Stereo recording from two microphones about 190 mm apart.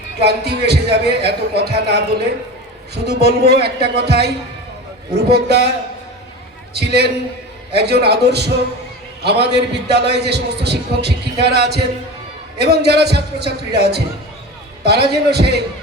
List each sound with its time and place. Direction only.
0.2 s a man's voice: 60° right (ahead or behind)
6.7 s a man's voice: 60° right (ahead or behind)